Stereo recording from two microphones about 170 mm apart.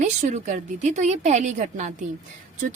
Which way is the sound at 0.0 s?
45° right (ahead or behind).